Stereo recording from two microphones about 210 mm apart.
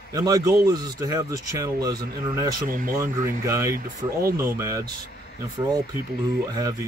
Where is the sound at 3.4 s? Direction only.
15° right (ahead or behind).